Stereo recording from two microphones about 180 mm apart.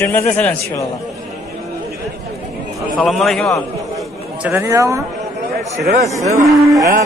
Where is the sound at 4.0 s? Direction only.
10° right (ahead or behind).